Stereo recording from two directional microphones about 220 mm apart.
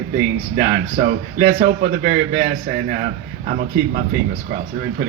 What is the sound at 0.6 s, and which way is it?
A man's voice, 35° right (ahead or behind).